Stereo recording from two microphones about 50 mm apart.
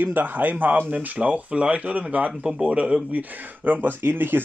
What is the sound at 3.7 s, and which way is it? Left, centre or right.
Speech, right.